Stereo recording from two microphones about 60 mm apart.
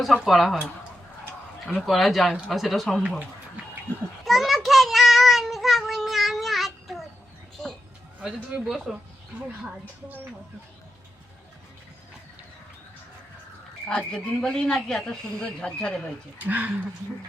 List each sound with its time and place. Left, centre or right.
0.0 s speech: centre
1.9 s speech: centre
4.3 s child singing: centre
8.2 s speech: centre
8.7 s speech: centre
14.1 s speech: centre
16.4 s speech: right